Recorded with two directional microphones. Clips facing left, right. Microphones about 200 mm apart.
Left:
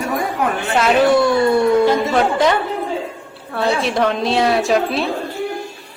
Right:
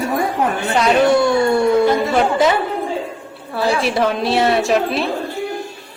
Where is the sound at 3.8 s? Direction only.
5° right (ahead or behind).